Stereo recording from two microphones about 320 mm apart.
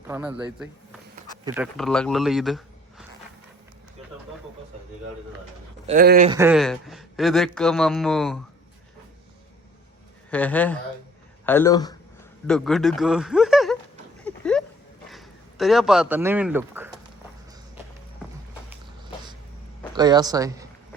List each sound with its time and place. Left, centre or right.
0.1 s a man's voice: centre
5.9 s speech: right
6.3 s speech: centre
10.3 s a man's voice: centre
14.3 s a sound: centre
15.1 s speech: centre
19.9 s speech: centre